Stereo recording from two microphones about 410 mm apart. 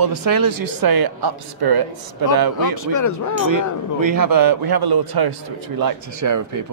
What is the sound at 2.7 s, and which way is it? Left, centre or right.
Speech, left.